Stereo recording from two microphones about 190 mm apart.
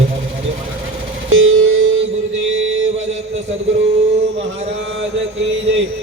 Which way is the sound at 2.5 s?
90° right.